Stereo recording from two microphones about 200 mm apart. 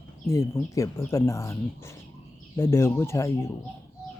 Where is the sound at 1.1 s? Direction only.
15° left (ahead or behind).